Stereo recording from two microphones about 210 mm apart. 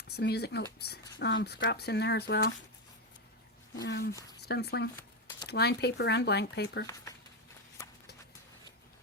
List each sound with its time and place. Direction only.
0.2 s speech: 50° left (ahead or behind)
3.8 s speech: 50° left (ahead or behind)